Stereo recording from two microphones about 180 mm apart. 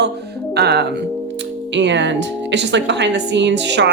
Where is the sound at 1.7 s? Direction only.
80° right.